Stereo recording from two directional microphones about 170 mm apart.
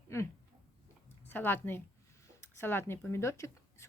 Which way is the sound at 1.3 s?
10° left (ahead or behind).